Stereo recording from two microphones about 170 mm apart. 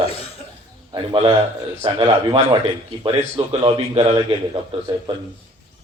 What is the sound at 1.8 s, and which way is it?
Speech, 30° right (ahead or behind).